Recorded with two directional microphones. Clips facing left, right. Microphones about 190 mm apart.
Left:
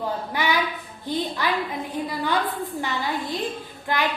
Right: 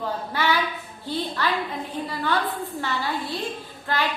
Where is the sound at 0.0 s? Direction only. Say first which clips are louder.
Even; 15° left (ahead or behind).